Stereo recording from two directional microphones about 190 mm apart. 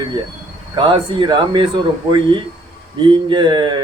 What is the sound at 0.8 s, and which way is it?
A man's voice, 25° right (ahead or behind).